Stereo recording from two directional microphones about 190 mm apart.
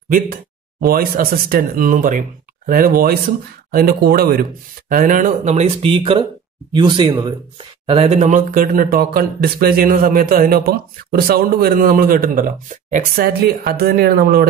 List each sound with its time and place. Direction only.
0.1 s speech: 45° right (ahead or behind)